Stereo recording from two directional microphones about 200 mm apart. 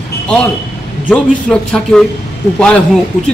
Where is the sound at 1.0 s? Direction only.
5° left (ahead or behind).